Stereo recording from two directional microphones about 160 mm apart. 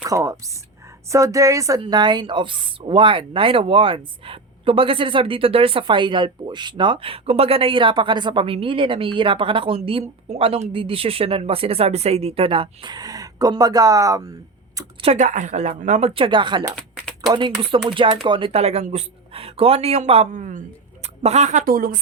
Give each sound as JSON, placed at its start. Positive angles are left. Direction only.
{"t": 0.0, "sound": "speech", "side_deg": -20}
{"t": 15.0, "sound": "speech", "side_deg": -45}